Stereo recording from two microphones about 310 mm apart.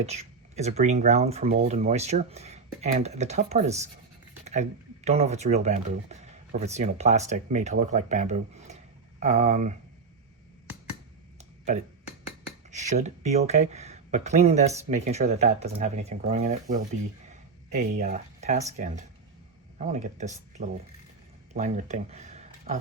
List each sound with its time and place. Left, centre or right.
0.0 s speech: right
5.0 s speech: right
11.3 s a sound: right
12.7 s speech: right
17.2 s a sound: right
19.8 s speech: right